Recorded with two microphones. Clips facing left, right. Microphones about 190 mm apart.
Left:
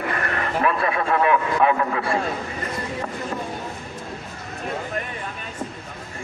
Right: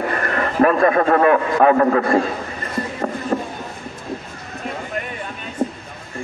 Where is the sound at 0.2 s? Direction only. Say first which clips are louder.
Right 7 dB; 45° right (ahead or behind).